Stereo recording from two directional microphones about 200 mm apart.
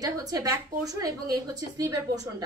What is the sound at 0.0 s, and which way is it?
A woman's voice, 20° right (ahead or behind).